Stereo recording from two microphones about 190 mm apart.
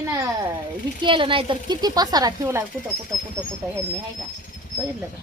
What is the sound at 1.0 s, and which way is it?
Speech, 25° right (ahead or behind).